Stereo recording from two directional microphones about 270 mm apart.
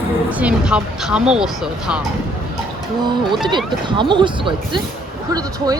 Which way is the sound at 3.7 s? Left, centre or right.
Centre.